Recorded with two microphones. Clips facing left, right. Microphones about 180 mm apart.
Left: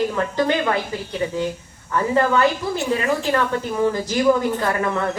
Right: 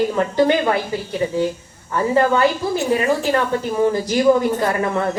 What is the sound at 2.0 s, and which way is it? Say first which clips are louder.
Speech: right 2 dB; 25° right (ahead or behind).